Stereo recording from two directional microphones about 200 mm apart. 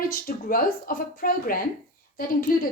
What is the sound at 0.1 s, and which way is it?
A woman's voice, 45° left (ahead or behind).